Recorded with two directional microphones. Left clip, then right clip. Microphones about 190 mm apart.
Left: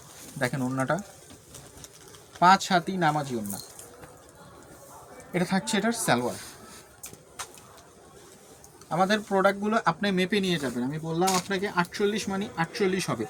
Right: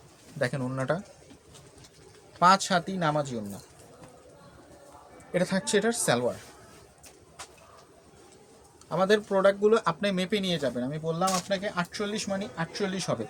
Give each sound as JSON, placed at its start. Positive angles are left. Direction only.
{"t": 0.3, "sound": "speech", "side_deg": -45}
{"t": 2.4, "sound": "speech", "side_deg": -50}
{"t": 5.3, "sound": "speech", "side_deg": -45}
{"t": 8.9, "sound": "speech", "side_deg": -40}